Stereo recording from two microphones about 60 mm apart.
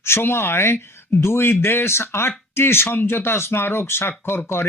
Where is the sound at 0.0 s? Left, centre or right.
Left.